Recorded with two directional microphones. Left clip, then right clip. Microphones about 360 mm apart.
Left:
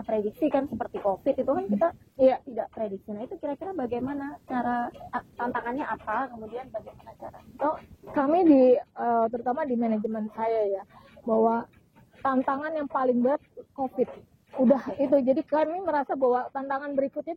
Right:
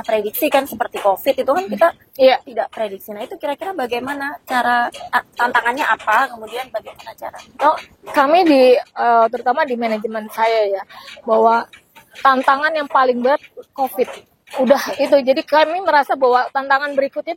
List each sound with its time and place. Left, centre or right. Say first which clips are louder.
0.0 s a woman's voice: right 9 dB; centre
11.2 s speech: right 10 dB; centre
12.2 s a woman's voice: right 13 dB; centre